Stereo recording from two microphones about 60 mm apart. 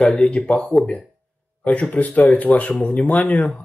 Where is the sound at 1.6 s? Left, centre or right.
Left.